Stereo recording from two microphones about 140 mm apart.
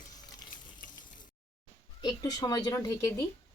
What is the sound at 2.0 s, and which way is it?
Speech, 25° left (ahead or behind).